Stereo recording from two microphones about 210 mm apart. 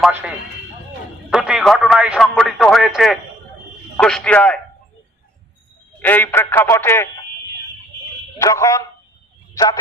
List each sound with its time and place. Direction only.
0.0 s speech: 5° right (ahead or behind)
6.0 s speech: 10° left (ahead or behind)
8.4 s speech: 15° left (ahead or behind)